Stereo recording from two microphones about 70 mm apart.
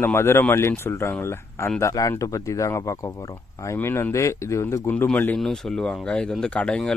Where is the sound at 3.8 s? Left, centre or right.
Left.